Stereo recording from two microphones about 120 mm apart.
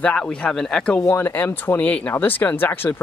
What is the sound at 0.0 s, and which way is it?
Speech, 10° left (ahead or behind).